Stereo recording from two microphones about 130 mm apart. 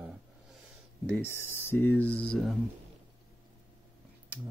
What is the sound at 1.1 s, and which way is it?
Speech, 15° left (ahead or behind).